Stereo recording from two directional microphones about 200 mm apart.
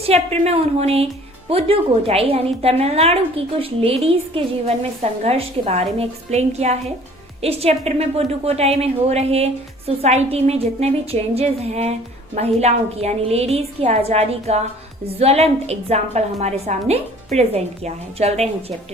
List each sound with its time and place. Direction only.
0.1 s a woman's voice: 30° right (ahead or behind)